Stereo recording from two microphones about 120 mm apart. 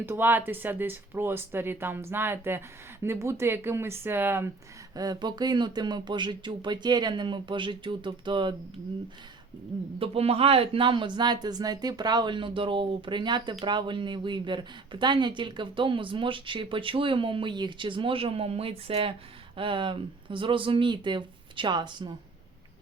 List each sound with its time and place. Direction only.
0.0 s speech: 15° right (ahead or behind)
4.9 s speech: 35° right (ahead or behind)
10.0 s speech: 55° right (ahead or behind); by 22.1 s 40° right (ahead or behind)